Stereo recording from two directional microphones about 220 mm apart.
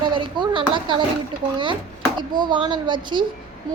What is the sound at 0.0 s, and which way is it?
A woman's voice, 20° right (ahead or behind).